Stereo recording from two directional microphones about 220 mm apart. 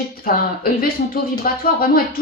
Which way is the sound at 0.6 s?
40° left (ahead or behind).